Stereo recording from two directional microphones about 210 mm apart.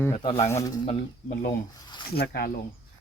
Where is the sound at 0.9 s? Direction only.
40° left (ahead or behind).